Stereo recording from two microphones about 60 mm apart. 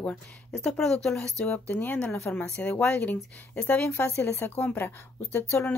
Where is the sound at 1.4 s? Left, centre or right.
Left.